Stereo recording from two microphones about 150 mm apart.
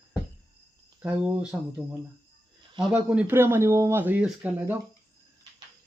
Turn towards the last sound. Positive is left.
turn(degrees=-10)  # may be behind; listen again after turning